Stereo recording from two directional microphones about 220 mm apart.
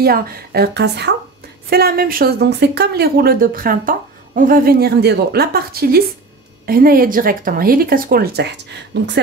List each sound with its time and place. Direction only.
0.0 s speech: 45° right (ahead or behind)